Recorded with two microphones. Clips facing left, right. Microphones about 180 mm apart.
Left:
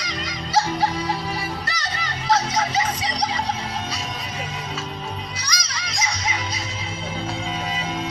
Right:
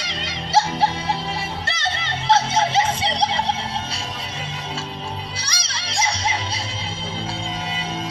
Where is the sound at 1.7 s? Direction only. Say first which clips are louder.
Right 3 dB; 25° right (ahead or behind).